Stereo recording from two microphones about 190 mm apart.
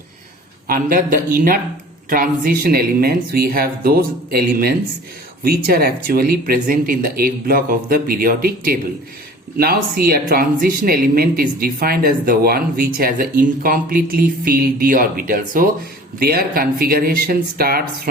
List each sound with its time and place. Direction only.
0.7 s speech: 45° right (ahead or behind)